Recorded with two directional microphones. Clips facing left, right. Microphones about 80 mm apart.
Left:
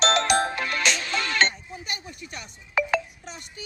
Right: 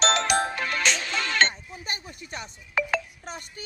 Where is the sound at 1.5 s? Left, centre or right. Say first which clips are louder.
Left 1 dB; right.